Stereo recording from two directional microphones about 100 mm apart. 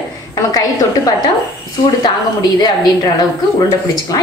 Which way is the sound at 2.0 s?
40° left (ahead or behind).